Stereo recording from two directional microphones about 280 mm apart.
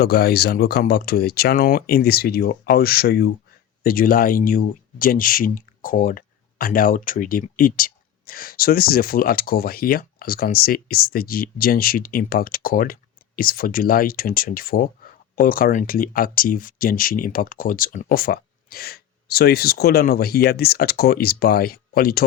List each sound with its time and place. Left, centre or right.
0.0 s speech: left